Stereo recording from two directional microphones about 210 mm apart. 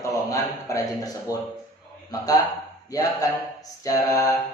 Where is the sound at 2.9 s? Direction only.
15° left (ahead or behind).